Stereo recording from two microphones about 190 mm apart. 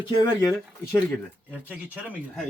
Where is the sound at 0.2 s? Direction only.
20° left (ahead or behind).